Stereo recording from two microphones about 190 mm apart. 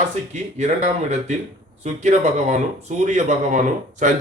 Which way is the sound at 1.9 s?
35° right (ahead or behind).